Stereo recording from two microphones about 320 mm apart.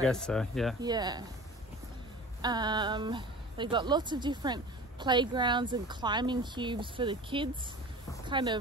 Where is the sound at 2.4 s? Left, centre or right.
Centre.